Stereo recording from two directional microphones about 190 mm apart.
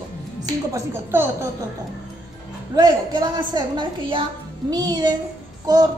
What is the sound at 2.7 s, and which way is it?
A woman's voice, 20° right (ahead or behind).